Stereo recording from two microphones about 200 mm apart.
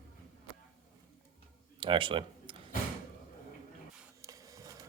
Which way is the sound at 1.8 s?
25° right (ahead or behind).